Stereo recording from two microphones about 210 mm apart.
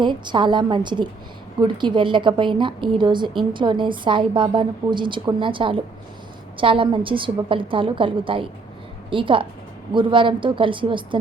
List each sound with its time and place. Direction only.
0.0 s a woman's voice: 20° right (ahead or behind)